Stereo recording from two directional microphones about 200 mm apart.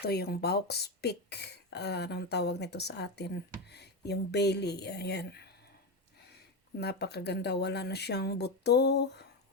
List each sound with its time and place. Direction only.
0.0 s speech: 55° left (ahead or behind)
6.7 s speech: 55° left (ahead or behind)